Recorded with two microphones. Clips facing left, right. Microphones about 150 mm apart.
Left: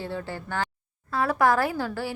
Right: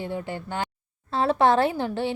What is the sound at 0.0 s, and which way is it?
Speech, 20° right (ahead or behind).